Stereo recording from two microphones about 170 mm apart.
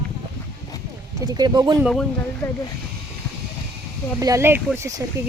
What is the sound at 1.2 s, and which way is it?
Speech, 25° right (ahead or behind).